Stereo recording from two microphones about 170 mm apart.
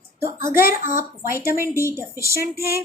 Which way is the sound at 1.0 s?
15° right (ahead or behind).